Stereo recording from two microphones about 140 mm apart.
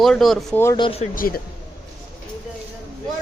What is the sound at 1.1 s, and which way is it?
Speech, 90° left.